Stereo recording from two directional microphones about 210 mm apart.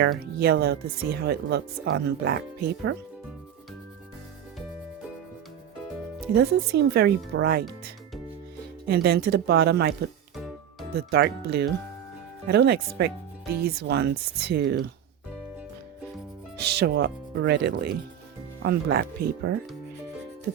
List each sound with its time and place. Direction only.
0.3 s speech: 50° right (ahead or behind)
6.3 s speech: 50° right (ahead or behind)
8.9 s speech: 50° right (ahead or behind)
10.3 s music: centre (ahead or behind)
10.9 s speech: 50° right (ahead or behind)
16.6 s speech: 50° right (ahead or behind)